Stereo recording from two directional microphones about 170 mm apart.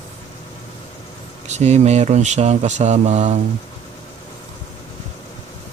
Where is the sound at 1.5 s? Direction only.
40° right (ahead or behind).